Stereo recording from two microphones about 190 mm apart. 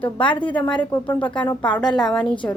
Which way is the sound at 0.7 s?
20° left (ahead or behind).